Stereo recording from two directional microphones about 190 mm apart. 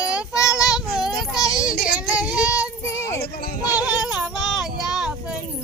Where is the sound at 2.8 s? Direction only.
15° left (ahead or behind).